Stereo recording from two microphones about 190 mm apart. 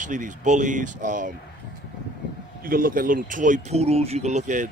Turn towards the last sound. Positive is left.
turn(degrees=-40)  # may be behind; listen again after turning